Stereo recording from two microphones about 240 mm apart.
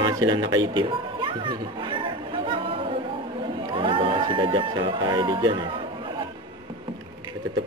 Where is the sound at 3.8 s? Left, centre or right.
Right.